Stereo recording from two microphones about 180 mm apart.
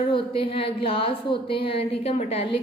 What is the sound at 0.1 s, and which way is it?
A woman's voice, 30° left (ahead or behind).